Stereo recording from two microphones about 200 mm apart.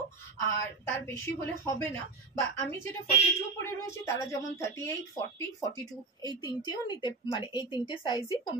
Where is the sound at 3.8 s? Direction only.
15° left (ahead or behind).